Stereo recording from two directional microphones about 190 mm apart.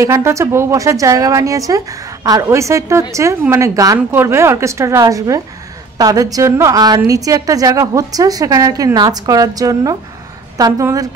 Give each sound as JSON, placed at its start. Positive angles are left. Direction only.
{"t": 0.0, "sound": "a woman's voice", "side_deg": -15}